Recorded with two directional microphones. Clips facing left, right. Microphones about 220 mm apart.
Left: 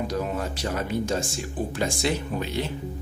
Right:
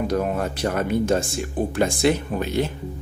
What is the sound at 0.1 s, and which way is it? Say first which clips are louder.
Speech: right 5 dB; 55° right (ahead or behind).